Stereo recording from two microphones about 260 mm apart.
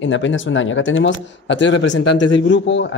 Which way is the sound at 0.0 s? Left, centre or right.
Left.